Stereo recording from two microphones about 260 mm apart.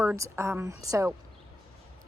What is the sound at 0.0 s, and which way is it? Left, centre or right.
A woman's voice, centre.